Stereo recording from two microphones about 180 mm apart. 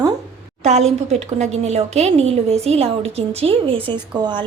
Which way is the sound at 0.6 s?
40° right (ahead or behind).